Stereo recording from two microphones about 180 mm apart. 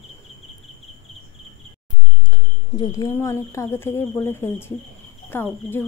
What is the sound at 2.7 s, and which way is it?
Speech, 20° left (ahead or behind).